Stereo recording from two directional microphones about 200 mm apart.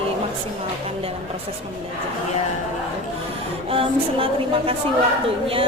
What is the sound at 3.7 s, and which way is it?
A woman's voice, 25° right (ahead or behind).